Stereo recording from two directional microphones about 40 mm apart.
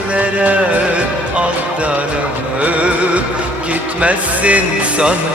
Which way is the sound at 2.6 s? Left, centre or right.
Right.